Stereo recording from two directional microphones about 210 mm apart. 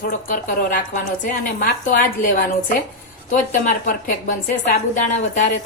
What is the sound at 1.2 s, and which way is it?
A woman's voice, 40° left (ahead or behind).